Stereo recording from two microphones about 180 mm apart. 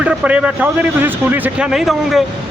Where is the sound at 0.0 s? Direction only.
5° right (ahead or behind).